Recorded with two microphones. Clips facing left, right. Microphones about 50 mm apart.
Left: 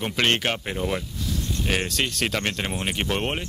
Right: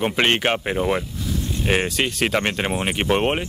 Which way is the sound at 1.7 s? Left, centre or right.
Centre.